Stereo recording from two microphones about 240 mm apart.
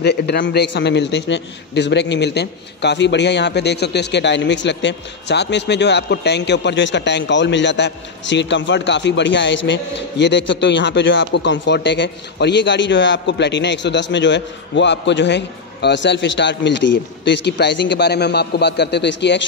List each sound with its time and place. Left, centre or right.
0.0 s a man's voice: left